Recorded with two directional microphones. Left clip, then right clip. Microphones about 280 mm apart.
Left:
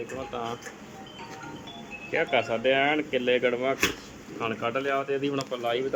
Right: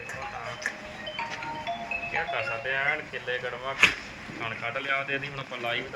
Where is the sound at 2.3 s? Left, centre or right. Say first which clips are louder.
Left 5 dB; left.